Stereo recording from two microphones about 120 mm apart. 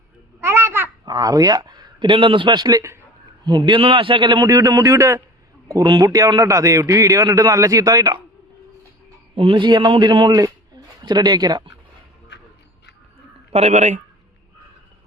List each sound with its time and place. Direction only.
0.4 s babbling: 20° right (ahead or behind)
1.0 s a man's voice: 30° right (ahead or behind)
3.4 s a man's voice: 40° right (ahead or behind)
9.3 s a man's voice: 50° right (ahead or behind)
13.5 s a man's voice: 65° right (ahead or behind)